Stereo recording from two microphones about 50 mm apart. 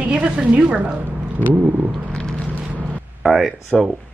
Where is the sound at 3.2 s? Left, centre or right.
Centre.